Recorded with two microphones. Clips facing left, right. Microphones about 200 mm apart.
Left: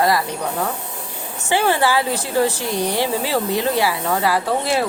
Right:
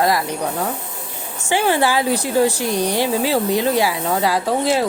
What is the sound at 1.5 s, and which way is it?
A woman's voice, 15° right (ahead or behind).